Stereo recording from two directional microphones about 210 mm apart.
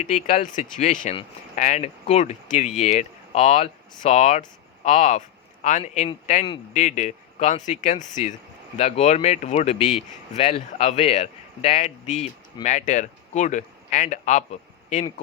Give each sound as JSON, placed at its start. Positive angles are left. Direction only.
{"t": 0.1, "sound": "speech", "side_deg": 35}